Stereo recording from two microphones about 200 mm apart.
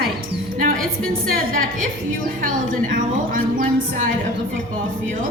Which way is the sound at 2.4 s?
40° right (ahead or behind).